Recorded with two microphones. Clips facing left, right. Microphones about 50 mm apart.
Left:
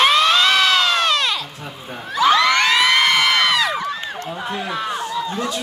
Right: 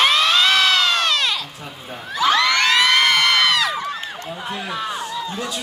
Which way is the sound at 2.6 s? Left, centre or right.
Centre.